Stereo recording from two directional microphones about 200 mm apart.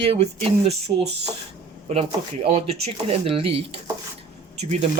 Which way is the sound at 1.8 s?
30° right (ahead or behind).